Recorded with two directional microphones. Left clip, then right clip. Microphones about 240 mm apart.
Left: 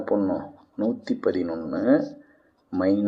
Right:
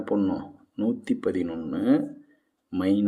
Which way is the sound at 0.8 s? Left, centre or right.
Right.